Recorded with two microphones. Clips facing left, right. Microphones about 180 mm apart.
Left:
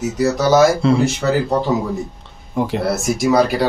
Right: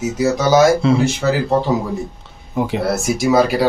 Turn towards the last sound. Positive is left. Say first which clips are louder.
# right 1 dB
turn(degrees=0)  # may be behind; listen again after turning